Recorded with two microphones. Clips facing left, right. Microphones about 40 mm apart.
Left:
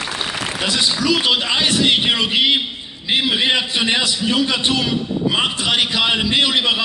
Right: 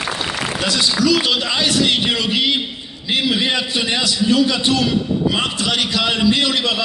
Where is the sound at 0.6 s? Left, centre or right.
Left.